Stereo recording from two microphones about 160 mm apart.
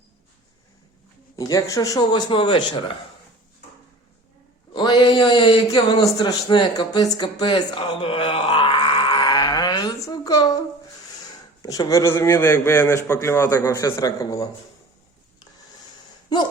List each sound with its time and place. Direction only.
1.4 s a man's voice: 20° left (ahead or behind)
4.7 s a sound: 30° left (ahead or behind)
5.7 s speech: 25° left (ahead or behind)
11.6 s a man's voice: 20° left (ahead or behind)